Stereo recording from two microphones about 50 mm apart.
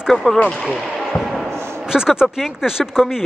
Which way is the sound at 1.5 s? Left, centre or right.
Right.